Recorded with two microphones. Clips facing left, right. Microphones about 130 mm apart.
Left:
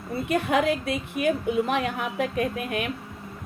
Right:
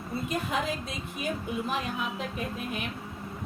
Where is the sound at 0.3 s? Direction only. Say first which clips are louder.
Left 9 dB; 70° left (ahead or behind).